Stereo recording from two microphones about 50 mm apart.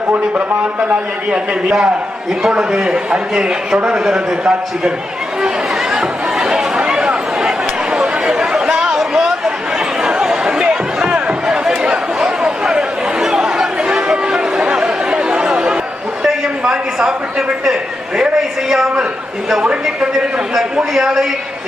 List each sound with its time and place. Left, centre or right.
0.1 s speech: right
1.3 s a man's voice: centre
5.9 s chatter: centre
10.0 s a sound: centre
14.8 s chatter: centre
16.2 s a sound: centre
18.7 s a man's voice: centre
20.6 s a man's voice: centre